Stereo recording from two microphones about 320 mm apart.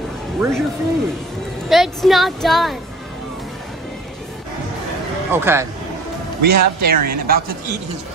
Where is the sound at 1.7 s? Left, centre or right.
Centre.